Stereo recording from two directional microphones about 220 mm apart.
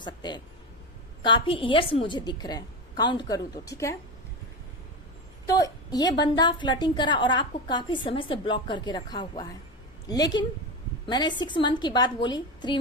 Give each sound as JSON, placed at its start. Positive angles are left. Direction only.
{"t": 0.0, "sound": "a woman's voice", "side_deg": 20}
{"t": 5.5, "sound": "a woman's voice", "side_deg": 15}